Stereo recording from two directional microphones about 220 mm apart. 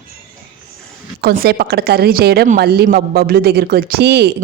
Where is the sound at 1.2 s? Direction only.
45° right (ahead or behind).